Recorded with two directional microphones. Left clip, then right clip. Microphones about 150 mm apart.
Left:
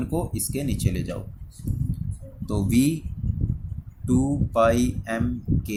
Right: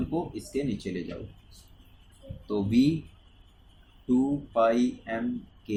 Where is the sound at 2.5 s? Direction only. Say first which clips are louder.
Left 2 dB; 45° left (ahead or behind).